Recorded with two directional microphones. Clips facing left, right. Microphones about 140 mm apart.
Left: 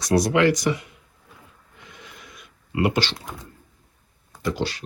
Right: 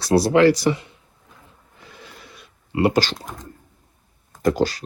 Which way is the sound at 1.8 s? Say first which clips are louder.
Right 2 dB; 35° right (ahead or behind).